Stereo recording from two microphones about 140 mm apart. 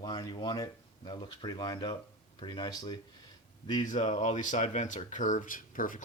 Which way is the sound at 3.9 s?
60° left (ahead or behind).